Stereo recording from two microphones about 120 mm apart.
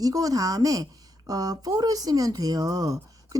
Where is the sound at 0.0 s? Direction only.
30° right (ahead or behind).